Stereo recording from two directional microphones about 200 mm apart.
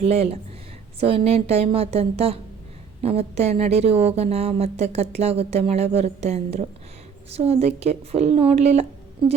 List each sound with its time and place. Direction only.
0.0 s a woman's voice: 30° right (ahead or behind)